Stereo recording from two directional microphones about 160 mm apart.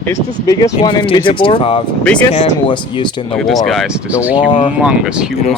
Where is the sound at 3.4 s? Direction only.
Centre (ahead or behind).